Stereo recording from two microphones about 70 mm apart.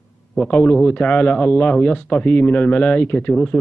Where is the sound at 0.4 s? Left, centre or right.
Centre.